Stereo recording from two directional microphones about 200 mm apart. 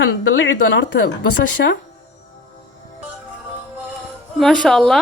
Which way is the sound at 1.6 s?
55° left (ahead or behind).